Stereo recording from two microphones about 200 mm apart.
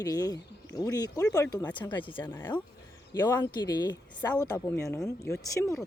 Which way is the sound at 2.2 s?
10° left (ahead or behind).